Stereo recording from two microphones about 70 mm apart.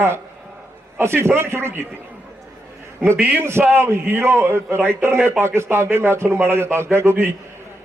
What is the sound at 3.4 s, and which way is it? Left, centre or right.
Speech, right.